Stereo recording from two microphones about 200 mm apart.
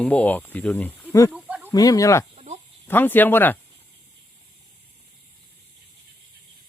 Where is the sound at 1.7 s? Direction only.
15° left (ahead or behind).